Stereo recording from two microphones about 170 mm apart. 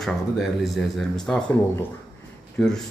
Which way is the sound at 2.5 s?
5° left (ahead or behind).